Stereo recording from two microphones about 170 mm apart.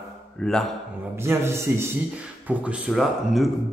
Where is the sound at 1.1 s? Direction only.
15° right (ahead or behind).